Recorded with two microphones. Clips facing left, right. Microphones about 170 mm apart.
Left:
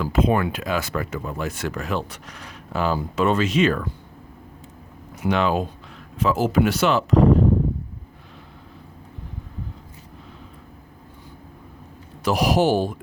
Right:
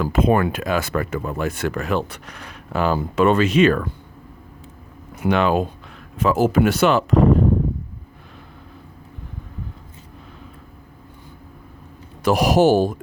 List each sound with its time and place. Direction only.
0.0 s speech: 50° right (ahead or behind)
5.1 s speech: 55° right (ahead or behind)
12.2 s speech: 50° right (ahead or behind)